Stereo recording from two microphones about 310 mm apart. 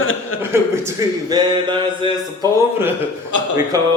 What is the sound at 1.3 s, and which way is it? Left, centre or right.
Speech, centre.